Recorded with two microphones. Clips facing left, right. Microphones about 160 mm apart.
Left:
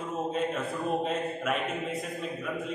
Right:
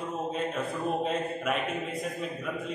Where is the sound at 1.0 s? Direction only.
Centre (ahead or behind).